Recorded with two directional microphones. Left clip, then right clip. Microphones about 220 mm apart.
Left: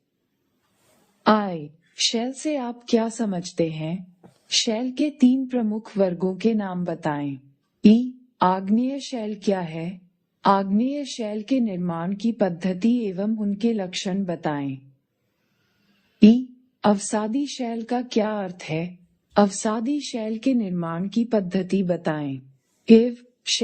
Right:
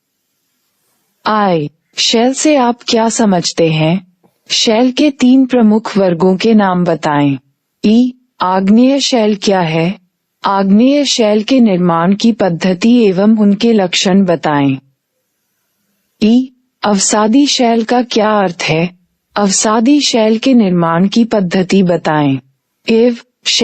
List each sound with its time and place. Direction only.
1.2 s speech: 45° right (ahead or behind)
16.1 s speech: 45° right (ahead or behind)